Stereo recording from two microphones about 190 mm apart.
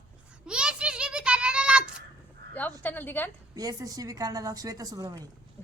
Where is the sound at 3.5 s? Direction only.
20° right (ahead or behind).